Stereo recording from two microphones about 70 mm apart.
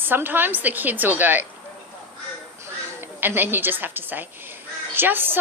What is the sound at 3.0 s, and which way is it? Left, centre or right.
A woman's voice, right.